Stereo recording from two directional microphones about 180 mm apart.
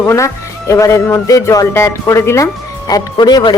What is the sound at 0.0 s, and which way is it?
A woman's voice, 15° left (ahead or behind).